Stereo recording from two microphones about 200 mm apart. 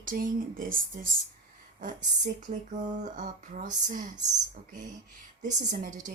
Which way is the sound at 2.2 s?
35° right (ahead or behind).